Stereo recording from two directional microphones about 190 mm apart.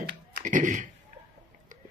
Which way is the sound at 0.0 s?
50° right (ahead or behind).